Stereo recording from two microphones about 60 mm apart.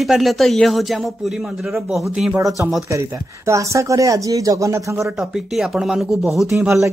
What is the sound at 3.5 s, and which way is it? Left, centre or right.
Speech, right.